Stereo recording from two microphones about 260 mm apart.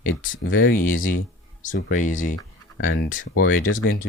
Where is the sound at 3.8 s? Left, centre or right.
Left.